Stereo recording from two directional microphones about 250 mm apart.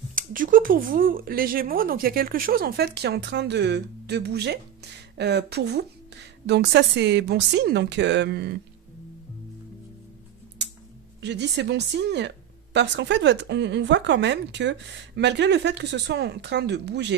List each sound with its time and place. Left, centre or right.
0.1 s speech: right
10.6 s a sound: right
11.1 s speech: right